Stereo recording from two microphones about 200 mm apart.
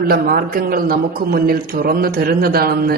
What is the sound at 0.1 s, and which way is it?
A man's voice, 50° right (ahead or behind).